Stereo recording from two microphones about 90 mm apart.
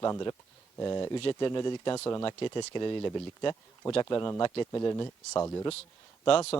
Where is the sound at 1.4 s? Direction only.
60° left (ahead or behind).